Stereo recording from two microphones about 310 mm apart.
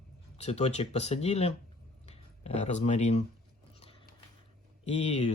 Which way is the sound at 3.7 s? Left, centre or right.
Centre.